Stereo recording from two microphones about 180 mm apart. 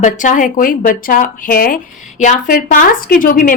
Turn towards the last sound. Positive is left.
turn(degrees=50)  # may be behind; listen again after turning